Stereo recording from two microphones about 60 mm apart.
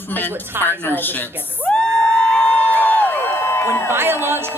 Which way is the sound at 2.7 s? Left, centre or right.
Left.